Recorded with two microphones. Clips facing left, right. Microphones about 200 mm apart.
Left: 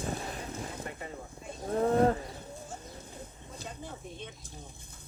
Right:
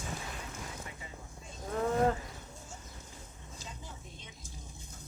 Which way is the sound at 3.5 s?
60° left (ahead or behind).